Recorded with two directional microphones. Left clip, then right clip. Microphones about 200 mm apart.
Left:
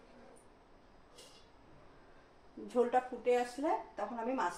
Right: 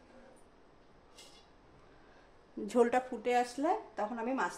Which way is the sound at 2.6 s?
50° right (ahead or behind).